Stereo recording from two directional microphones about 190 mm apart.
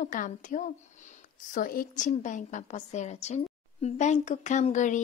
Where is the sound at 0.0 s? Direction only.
40° left (ahead or behind).